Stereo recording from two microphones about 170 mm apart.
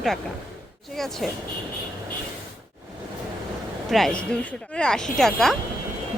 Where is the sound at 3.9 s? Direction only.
5° left (ahead or behind).